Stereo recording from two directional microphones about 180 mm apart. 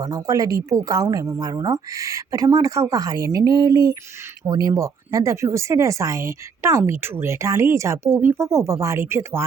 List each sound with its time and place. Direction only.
0.0 s speech: 20° right (ahead or behind)